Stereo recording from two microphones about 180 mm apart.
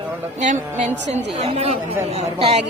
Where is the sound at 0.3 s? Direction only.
45° right (ahead or behind).